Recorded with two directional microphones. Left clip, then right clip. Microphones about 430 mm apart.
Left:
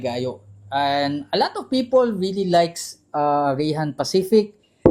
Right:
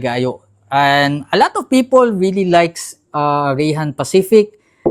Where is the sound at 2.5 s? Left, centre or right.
Right.